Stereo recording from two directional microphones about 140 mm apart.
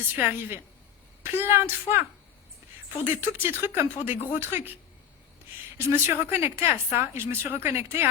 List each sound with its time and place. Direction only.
0.2 s a woman's voice: 15° right (ahead or behind)
5.7 s a woman's voice: 20° right (ahead or behind)